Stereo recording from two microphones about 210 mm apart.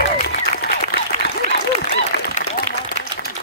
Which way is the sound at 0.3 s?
50° left (ahead or behind).